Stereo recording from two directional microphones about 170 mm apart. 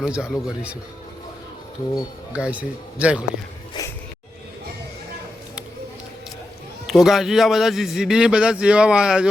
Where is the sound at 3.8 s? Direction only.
20° left (ahead or behind).